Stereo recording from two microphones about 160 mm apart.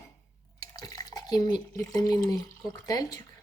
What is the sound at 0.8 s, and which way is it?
A woman's voice, 25° left (ahead or behind).